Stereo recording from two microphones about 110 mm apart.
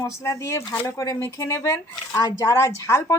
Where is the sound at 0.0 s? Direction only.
30° left (ahead or behind).